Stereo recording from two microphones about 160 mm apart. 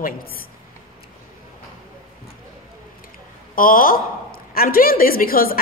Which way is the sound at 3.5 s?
60° left (ahead or behind).